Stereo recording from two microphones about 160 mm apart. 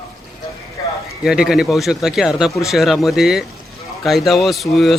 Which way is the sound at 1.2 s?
5° right (ahead or behind).